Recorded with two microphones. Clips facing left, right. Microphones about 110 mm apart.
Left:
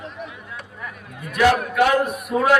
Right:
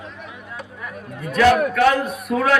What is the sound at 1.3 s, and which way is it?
A man's voice, 15° left (ahead or behind).